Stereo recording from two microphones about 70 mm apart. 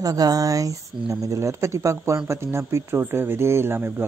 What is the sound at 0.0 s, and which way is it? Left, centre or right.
Speech, right.